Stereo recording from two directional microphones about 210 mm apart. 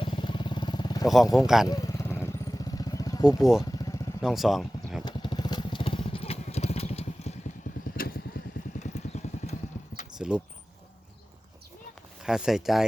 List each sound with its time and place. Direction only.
0.0 s vehicle: 25° left (ahead or behind)
1.0 s speech: centre (ahead or behind)
1.6 s vehicle: 15° left (ahead or behind)
3.2 s speech: centre (ahead or behind)
3.6 s motorcycle: 15° left (ahead or behind)
4.2 s speech: centre (ahead or behind)
5.0 s motorcycle: 20° left (ahead or behind)
7.9 s vehicle: 45° left (ahead or behind)
8.8 s horse: 35° left (ahead or behind)
10.2 s a sound: 5° right (ahead or behind)
12.2 s speech: centre (ahead or behind)